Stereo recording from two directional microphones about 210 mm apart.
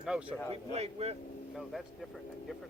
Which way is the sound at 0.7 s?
30° right (ahead or behind).